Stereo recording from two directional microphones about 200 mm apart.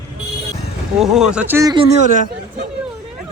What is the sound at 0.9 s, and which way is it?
Speech, centre (ahead or behind).